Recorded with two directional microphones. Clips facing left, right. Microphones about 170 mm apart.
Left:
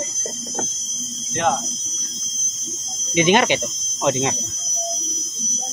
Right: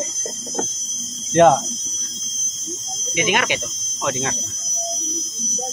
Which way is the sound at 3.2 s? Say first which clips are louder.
Left 5 dB; 30° left (ahead or behind).